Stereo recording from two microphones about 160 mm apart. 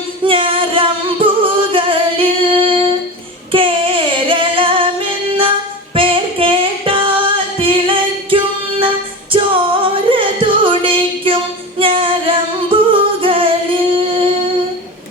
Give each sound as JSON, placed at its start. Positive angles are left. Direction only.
{"t": 0.3, "sound": "music", "side_deg": -35}
{"t": 3.5, "sound": "female singing", "side_deg": -35}
{"t": 5.3, "sound": "music", "side_deg": -35}
{"t": 9.8, "sound": "music", "side_deg": -35}
{"t": 11.8, "sound": "singing", "side_deg": -35}